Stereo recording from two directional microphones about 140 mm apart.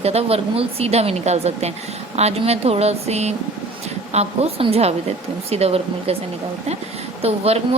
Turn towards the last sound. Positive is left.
turn(degrees=-45)  # may be behind; listen again after turning